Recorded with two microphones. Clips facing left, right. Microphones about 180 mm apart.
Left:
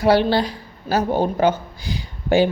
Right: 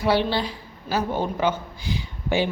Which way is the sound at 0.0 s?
40° left (ahead or behind).